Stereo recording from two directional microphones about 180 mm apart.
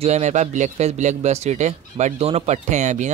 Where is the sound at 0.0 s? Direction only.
40° right (ahead or behind).